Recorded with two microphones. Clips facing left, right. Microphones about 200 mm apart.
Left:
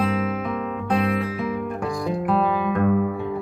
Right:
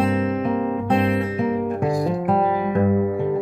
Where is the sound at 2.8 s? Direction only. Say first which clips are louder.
Right 2 dB; 25° right (ahead or behind).